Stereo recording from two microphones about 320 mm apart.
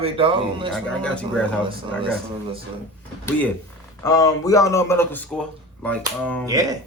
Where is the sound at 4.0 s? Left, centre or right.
Centre.